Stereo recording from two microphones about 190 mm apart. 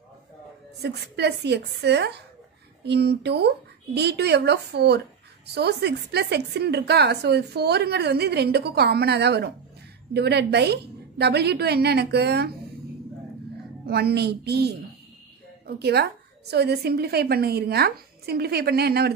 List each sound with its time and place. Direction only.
0.8 s a woman's voice: 60° right (ahead or behind)
13.8 s a woman's voice: 55° right (ahead or behind)